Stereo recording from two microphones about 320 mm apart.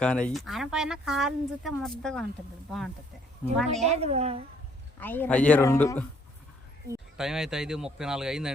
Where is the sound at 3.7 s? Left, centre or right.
Centre.